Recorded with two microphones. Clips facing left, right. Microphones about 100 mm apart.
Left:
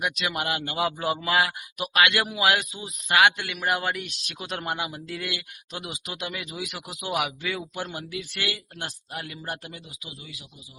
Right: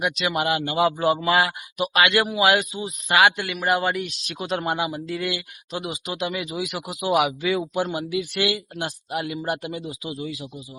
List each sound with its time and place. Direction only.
0.0 s speech: 5° right (ahead or behind); by 9.8 s 20° right (ahead or behind)
9.8 s speech: 35° right (ahead or behind)